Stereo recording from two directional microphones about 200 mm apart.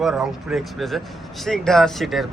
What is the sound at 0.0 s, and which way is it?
A man's voice, 5° right (ahead or behind).